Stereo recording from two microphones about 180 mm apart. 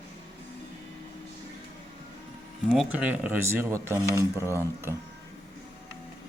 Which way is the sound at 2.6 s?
5° right (ahead or behind).